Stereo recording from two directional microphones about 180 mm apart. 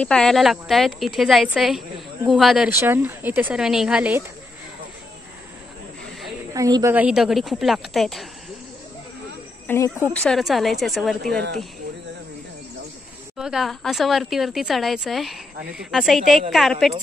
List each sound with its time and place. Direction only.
0.0 s a woman's voice: 5° left (ahead or behind)
2.7 s speech: 10° right (ahead or behind)
6.5 s a woman's voice: 20° right (ahead or behind); by 8.3 s centre (ahead or behind)
9.7 s speech: 15° left (ahead or behind)
10.2 s a woman's voice: centre (ahead or behind)
13.4 s a woman's voice: centre (ahead or behind)